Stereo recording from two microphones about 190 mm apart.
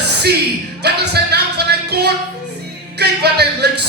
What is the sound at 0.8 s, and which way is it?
Music, 60° right (ahead or behind).